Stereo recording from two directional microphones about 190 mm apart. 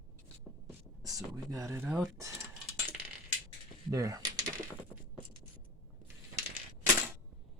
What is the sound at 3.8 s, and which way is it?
Speech, 15° right (ahead or behind).